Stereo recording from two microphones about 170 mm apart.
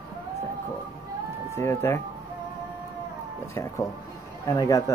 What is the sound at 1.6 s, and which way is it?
Speech, 15° left (ahead or behind).